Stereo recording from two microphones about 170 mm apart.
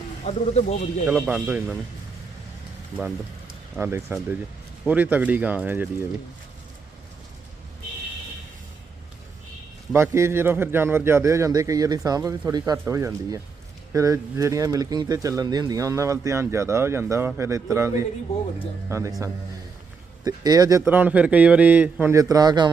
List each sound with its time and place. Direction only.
0.3 s speech: 40° left (ahead or behind)
1.3 s speech: 10° right (ahead or behind)
3.8 s speech: 15° right (ahead or behind)
9.9 s speech: 15° right (ahead or behind)
20.2 s speech: 25° right (ahead or behind)